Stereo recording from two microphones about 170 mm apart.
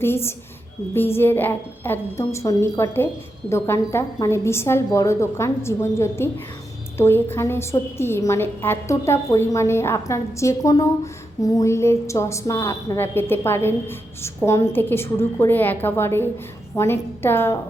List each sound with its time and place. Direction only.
0.0 s a woman's voice: 15° left (ahead or behind)